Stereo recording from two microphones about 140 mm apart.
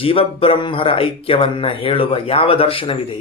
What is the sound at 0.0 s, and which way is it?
Speech, 40° left (ahead or behind).